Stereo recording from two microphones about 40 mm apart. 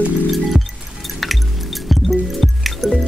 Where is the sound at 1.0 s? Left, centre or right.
Centre.